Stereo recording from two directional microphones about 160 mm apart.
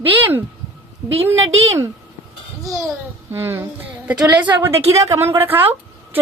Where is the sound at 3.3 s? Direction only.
15° right (ahead or behind).